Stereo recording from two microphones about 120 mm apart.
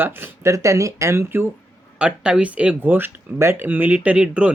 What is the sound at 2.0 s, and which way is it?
Speech, 5° right (ahead or behind).